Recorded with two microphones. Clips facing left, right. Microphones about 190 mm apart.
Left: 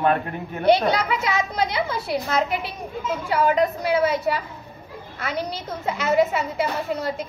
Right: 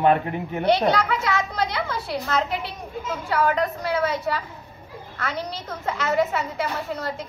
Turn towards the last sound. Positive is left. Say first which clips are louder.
# left 3 dB
turn(degrees=10)  # may be behind; listen again after turning